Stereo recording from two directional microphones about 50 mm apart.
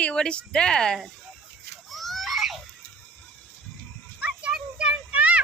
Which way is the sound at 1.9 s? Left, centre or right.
Centre.